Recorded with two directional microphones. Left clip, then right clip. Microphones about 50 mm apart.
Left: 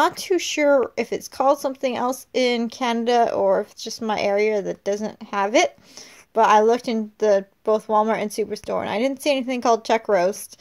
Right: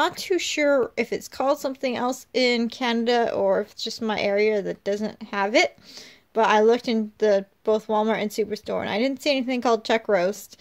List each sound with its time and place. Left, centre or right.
0.1 s speech: left